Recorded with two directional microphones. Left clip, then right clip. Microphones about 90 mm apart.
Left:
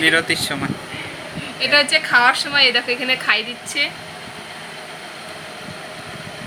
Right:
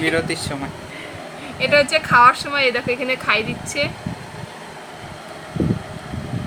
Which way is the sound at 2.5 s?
75° right (ahead or behind).